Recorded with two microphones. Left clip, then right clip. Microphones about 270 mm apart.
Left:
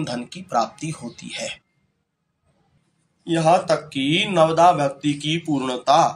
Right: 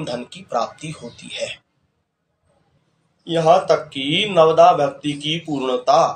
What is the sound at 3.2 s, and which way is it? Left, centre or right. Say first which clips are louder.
Speech: right 3 dB; left.